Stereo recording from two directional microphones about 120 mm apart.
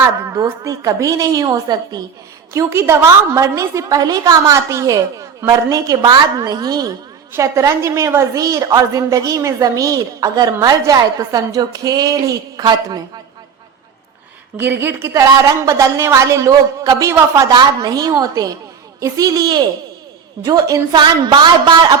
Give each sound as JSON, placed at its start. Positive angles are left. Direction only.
{"t": 0.3, "sound": "a woman's voice", "side_deg": -25}
{"t": 14.6, "sound": "a woman's voice", "side_deg": -20}
{"t": 17.5, "sound": "a woman's voice", "side_deg": -35}